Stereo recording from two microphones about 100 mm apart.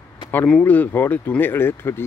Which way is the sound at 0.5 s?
15° left (ahead or behind).